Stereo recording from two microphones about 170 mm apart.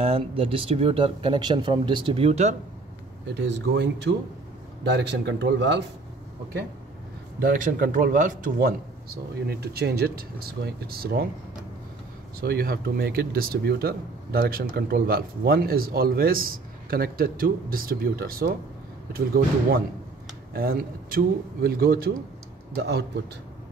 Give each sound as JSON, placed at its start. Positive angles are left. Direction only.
{"t": 0.0, "sound": "speech", "side_deg": -35}
{"t": 3.3, "sound": "speech", "side_deg": -90}
{"t": 7.3, "sound": "speech", "side_deg": -55}
{"t": 12.4, "sound": "speech", "side_deg": -65}
{"t": 22.8, "sound": "a man's voice", "side_deg": -80}